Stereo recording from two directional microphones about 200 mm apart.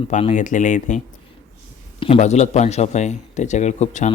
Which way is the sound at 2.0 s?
30° left (ahead or behind).